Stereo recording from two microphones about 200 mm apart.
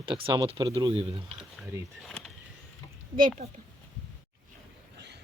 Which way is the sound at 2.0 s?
Centre (ahead or behind).